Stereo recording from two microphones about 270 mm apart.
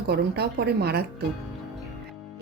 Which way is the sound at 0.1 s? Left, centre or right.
Right.